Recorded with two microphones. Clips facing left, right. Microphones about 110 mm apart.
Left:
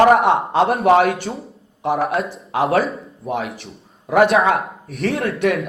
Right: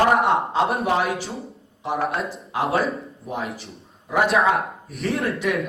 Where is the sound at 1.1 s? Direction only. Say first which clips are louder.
Left 2 dB; centre (ahead or behind).